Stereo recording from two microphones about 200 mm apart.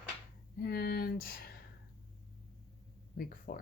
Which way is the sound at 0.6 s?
50° left (ahead or behind).